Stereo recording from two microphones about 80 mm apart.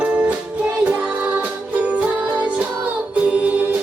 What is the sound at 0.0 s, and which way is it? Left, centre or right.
Music, centre.